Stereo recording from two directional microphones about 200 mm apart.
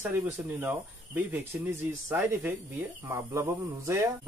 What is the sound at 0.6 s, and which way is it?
Speech, 10° right (ahead or behind).